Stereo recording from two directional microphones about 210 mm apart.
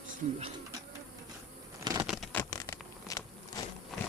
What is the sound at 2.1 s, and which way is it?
Patter, centre (ahead or behind).